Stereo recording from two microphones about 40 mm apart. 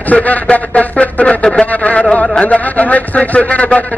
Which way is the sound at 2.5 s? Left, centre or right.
Left.